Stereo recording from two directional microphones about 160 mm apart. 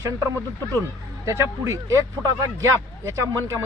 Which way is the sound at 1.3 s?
20° right (ahead or behind).